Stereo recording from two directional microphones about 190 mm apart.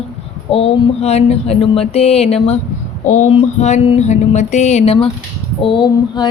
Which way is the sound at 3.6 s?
35° left (ahead or behind).